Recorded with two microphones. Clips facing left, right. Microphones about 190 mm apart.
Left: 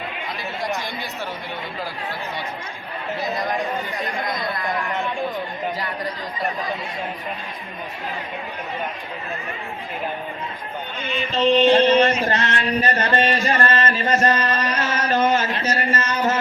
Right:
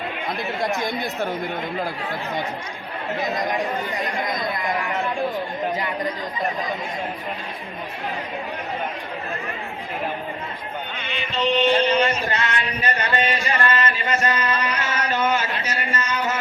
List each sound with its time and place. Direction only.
3.2 s speech: 20° right (ahead or behind)
3.6 s speech: centre (ahead or behind)
4.4 s speech: 20° right (ahead or behind)
4.8 s speech: centre (ahead or behind)
11.3 s a sound: 40° left (ahead or behind)